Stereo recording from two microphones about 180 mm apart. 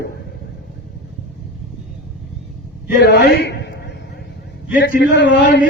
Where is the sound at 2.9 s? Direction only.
65° left (ahead or behind).